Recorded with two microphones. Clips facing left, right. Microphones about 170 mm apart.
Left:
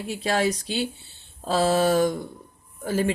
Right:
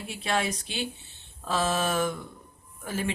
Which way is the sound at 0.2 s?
35° left (ahead or behind).